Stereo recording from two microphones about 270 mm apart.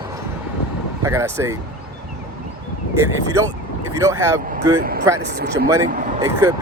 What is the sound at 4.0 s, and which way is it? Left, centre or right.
Speech, centre.